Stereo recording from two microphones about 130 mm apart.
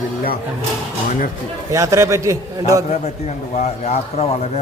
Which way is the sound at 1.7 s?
25° right (ahead or behind).